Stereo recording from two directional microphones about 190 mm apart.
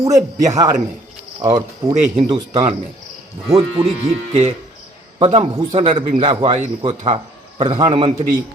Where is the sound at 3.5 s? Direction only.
30° right (ahead or behind).